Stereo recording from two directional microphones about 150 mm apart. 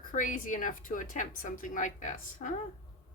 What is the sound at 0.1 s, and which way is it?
A woman's voice, 60° left (ahead or behind).